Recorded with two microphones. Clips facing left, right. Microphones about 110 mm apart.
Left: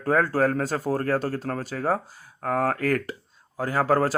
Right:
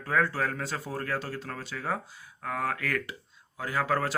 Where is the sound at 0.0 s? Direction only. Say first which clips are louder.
Left 7 dB; 40° left (ahead or behind).